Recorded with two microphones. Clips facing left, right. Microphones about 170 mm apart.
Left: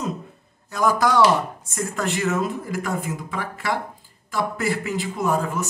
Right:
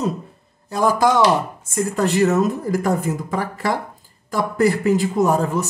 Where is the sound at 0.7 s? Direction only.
30° right (ahead or behind).